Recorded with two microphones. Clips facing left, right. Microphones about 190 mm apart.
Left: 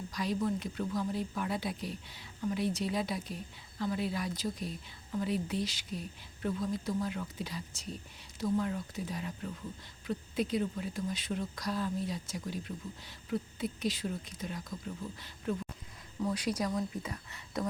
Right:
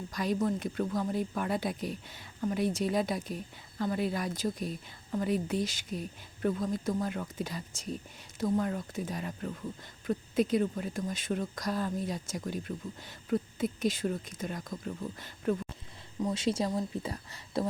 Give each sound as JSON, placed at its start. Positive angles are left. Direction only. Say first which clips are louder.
{"t": 0.1, "sound": "speech", "louder": "right 3 dB", "side_deg": -50}
{"t": 16.2, "sound": "speech", "louder": "right 3 dB", "side_deg": -25}